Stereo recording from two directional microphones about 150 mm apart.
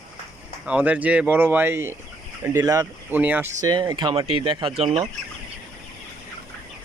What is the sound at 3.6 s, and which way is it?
Speech, 25° right (ahead or behind).